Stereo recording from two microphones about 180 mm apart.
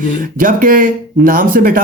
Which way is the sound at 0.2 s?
50° right (ahead or behind).